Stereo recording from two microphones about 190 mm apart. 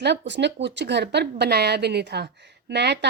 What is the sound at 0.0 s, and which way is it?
Speech, 65° right (ahead or behind).